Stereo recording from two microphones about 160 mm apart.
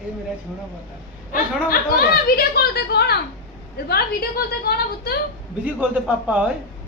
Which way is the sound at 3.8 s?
75° left (ahead or behind).